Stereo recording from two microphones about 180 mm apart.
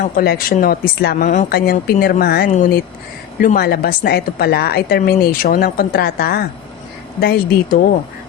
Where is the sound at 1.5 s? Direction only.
60° left (ahead or behind).